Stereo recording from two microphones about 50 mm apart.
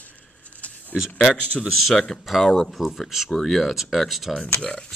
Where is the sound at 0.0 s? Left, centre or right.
Left.